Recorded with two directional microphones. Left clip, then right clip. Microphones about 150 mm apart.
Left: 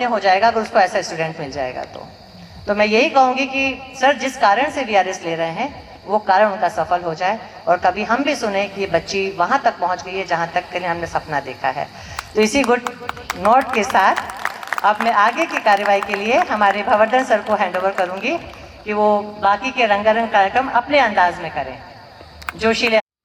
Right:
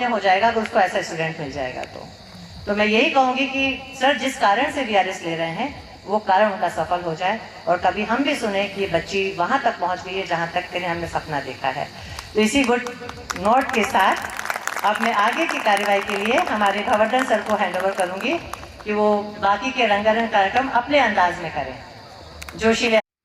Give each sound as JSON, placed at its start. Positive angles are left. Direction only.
{"t": 0.0, "sound": "a woman's voice", "side_deg": 30}